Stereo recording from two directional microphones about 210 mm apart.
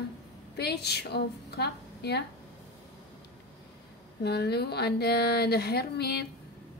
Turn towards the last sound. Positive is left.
turn(degrees=50)  # may be behind; listen again after turning